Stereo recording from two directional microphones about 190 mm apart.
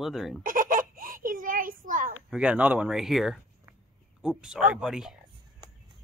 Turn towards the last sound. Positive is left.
turn(degrees=0)  # may be behind; listen again after turning